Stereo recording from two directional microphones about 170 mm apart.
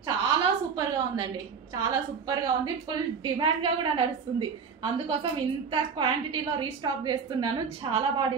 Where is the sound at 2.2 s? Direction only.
25° right (ahead or behind).